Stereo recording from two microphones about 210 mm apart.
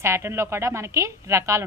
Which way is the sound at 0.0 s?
10° right (ahead or behind).